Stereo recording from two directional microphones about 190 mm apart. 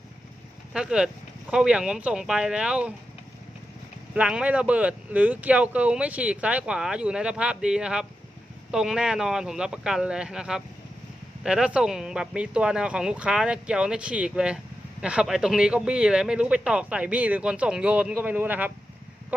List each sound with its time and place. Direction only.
0.7 s speech: 5° right (ahead or behind)
4.1 s speech: 5° right (ahead or behind)